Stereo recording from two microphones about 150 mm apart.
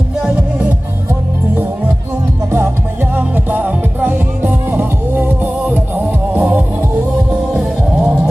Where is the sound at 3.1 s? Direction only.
10° right (ahead or behind).